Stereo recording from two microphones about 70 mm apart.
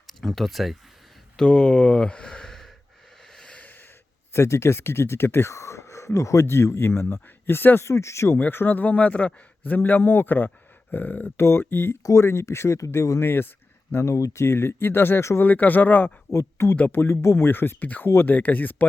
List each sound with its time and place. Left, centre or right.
0.1 s speech: centre
1.4 s speech: centre
3.3 s snort: centre
4.4 s speech: left
7.9 s speech: left
8.4 s a man's voice: left
11.3 s speech: left
12.0 s speech: left
15.4 s a man's voice: left
16.3 s speech: left
16.7 s a man's voice: left